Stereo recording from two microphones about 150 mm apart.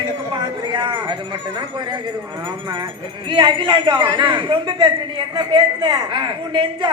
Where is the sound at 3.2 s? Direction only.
30° right (ahead or behind).